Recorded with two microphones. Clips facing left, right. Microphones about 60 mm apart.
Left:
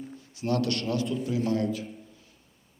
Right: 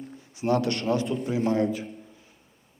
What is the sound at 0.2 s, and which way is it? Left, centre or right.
A man's voice, right.